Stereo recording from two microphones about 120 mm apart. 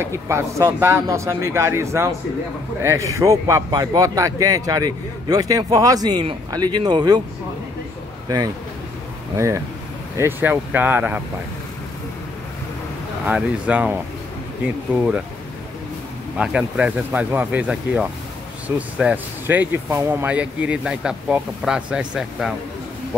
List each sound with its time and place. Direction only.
0.0 s speech: 20° right (ahead or behind)
10.1 s speech: 20° right (ahead or behind)
13.3 s speech: 10° right (ahead or behind)
16.3 s speech: 10° right (ahead or behind)